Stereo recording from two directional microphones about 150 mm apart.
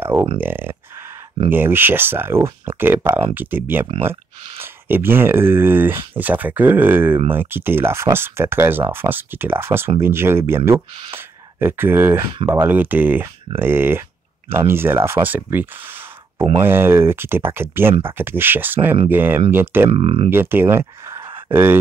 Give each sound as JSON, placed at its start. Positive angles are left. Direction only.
{"t": 0.0, "sound": "speech", "side_deg": -15}
{"t": 4.8, "sound": "speech", "side_deg": -15}
{"t": 19.9, "sound": "speech", "side_deg": -40}
{"t": 20.2, "sound": "speech", "side_deg": -15}